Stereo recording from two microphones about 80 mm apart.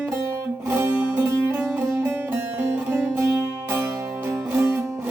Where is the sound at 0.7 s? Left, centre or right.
Right.